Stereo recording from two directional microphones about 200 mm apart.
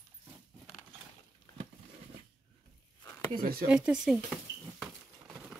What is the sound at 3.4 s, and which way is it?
Speech, 45° right (ahead or behind).